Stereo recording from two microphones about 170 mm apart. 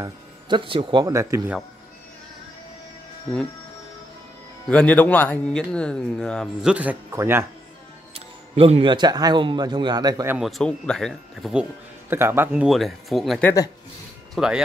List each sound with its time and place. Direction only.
0.0 s speech: 30° right (ahead or behind)
4.6 s speech: 5° left (ahead or behind); by 7.4 s 15° right (ahead or behind)
8.1 s speech: 35° right (ahead or behind)
10.2 s speech: 10° right (ahead or behind)
10.6 s speech: 5° left (ahead or behind)
12.1 s speech: 15° right (ahead or behind)
12.6 s speech: centre (ahead or behind)